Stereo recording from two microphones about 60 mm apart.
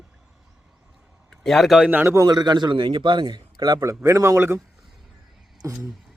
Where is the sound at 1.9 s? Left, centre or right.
Right.